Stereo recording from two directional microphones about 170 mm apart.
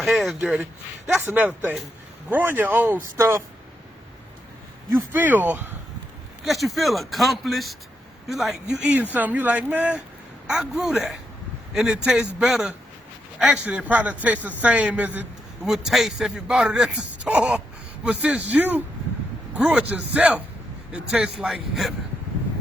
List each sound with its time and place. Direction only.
0.0 s a man's voice: centre (ahead or behind); by 3.4 s 15° right (ahead or behind)
5.1 s a man's voice: 10° right (ahead or behind)
6.4 s a man's voice: centre (ahead or behind)